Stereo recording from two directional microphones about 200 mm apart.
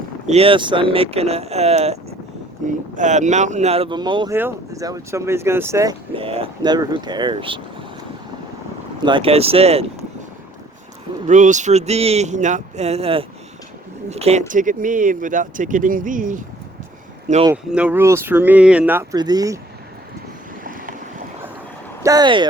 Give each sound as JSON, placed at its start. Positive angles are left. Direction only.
{"t": 0.3, "sound": "speech", "side_deg": -30}
{"t": 9.0, "sound": "speech", "side_deg": -25}
{"t": 11.3, "sound": "speech", "side_deg": -40}
{"t": 17.5, "sound": "speech", "side_deg": -5}
{"t": 22.0, "sound": "speech", "side_deg": -20}